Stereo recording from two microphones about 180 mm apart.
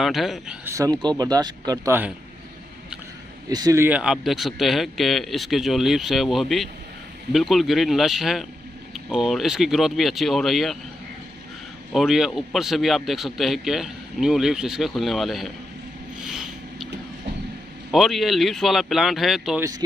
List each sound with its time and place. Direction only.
0.0 s a man's voice: centre (ahead or behind)
0.9 s speech: 25° right (ahead or behind)
3.4 s a man's voice: 20° right (ahead or behind); by 10.8 s centre (ahead or behind)
11.9 s a man's voice: centre (ahead or behind)
16.3 s a sound: 5° right (ahead or behind)
17.9 s a man's voice: centre (ahead or behind)